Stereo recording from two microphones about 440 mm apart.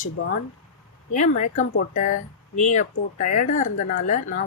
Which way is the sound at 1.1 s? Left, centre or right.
Centre.